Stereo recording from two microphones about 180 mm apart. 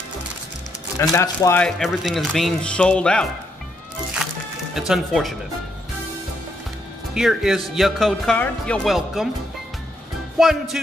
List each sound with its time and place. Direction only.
0.9 s speech: 20° left (ahead or behind)
1.6 s speech: centre (ahead or behind)
4.7 s speech: centre (ahead or behind)
7.2 s speech: centre (ahead or behind)
10.4 s speech: centre (ahead or behind)